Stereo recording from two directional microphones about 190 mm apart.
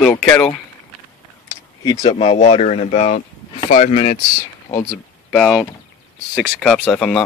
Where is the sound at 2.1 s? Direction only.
35° left (ahead or behind).